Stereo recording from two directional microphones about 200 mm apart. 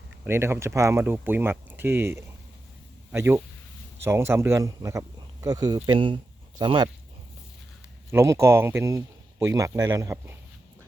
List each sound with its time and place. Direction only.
0.3 s speech: 10° right (ahead or behind)
8.1 s speech: 15° right (ahead or behind)